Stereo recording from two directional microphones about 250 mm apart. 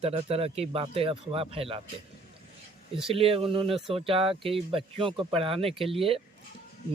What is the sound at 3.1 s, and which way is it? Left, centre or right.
Speech, right.